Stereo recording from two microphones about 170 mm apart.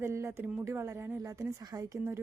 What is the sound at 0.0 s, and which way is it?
Speech, 15° right (ahead or behind).